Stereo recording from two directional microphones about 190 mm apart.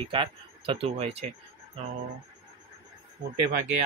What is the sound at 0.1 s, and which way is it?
Speech, 25° right (ahead or behind).